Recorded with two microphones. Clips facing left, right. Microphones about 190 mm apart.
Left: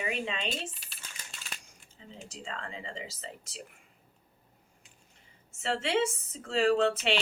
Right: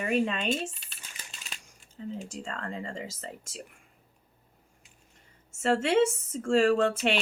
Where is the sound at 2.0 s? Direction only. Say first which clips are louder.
Right 9 dB; 50° right (ahead or behind).